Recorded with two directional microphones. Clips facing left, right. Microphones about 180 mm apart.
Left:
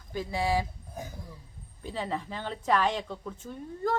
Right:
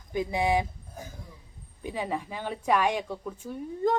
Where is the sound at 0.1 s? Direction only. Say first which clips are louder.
Right 3 dB; 20° right (ahead or behind).